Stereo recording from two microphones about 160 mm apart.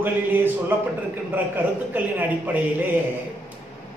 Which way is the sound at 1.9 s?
10° right (ahead or behind).